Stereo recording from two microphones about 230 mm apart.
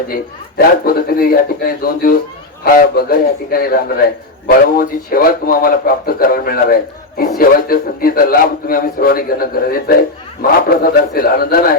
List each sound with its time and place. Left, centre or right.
0.1 s a man's voice: left